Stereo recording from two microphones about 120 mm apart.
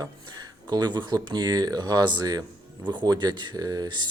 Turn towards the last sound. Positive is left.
turn(degrees=-35)  # may be behind; listen again after turning